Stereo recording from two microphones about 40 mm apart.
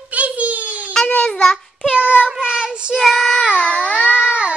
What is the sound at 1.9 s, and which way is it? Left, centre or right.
Child singing, right.